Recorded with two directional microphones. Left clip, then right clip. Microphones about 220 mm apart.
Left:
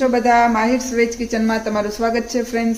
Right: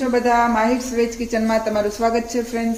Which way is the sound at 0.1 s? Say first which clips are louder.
Left 2 dB; 25° left (ahead or behind).